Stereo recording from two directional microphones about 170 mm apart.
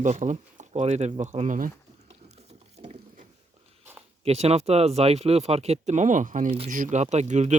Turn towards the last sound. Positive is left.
turn(degrees=-45)  # may be behind; listen again after turning